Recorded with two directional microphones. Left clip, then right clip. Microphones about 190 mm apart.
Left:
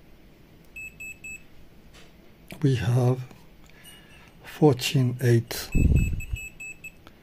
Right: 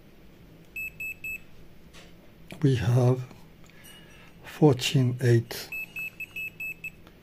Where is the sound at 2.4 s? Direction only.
5° left (ahead or behind).